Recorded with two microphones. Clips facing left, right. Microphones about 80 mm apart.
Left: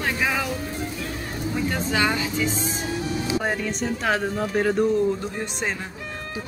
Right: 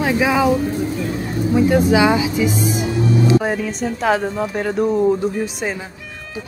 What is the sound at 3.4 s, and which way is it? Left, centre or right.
Speech, centre.